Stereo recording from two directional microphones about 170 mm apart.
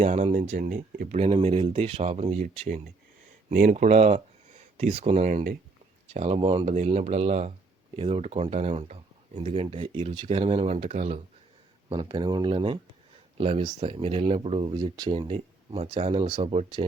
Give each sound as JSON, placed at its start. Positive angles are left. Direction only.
{"t": 0.0, "sound": "speech", "side_deg": -40}
{"t": 6.1, "sound": "speech", "side_deg": -35}
{"t": 11.9, "sound": "speech", "side_deg": -25}